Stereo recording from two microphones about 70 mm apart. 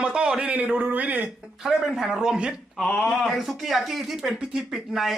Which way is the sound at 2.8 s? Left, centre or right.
Centre.